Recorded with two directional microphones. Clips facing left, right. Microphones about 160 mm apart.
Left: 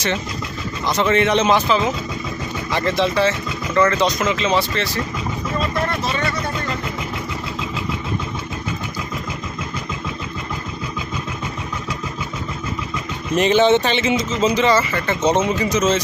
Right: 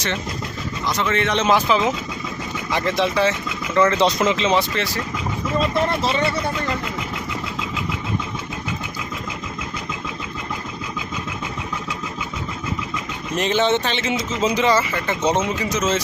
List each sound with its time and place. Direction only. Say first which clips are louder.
0.9 s speech: left 5 dB; 25° left (ahead or behind)
1.2 s speech: left 4 dB; 5° left (ahead or behind)
1.5 s speech: left 1 dB; 10° right (ahead or behind)
3.9 s speech: right 1 dB; 25° right (ahead or behind)
6.0 s speech: right 2 dB; 25° right (ahead or behind)
13.3 s speech: left 5 dB; 5° left (ahead or behind)
14.4 s speech: left 1 dB; 10° right (ahead or behind)